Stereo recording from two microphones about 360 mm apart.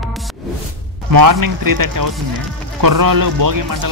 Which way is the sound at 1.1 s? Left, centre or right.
Right.